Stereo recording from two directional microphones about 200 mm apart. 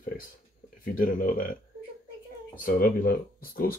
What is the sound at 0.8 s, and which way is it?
Speech, 45° left (ahead or behind).